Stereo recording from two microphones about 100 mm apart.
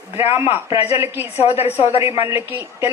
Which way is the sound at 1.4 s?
90° left.